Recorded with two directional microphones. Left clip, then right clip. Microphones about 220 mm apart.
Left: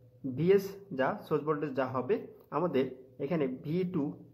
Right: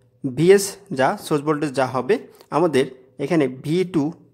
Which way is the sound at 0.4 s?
45° right (ahead or behind).